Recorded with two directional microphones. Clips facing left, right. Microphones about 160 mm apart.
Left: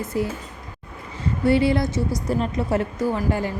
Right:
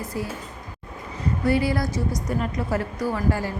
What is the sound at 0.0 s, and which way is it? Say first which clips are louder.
Speech: left 5 dB; 25° left (ahead or behind).